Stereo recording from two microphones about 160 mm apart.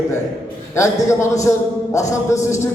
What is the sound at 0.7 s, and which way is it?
A man's voice, 20° left (ahead or behind).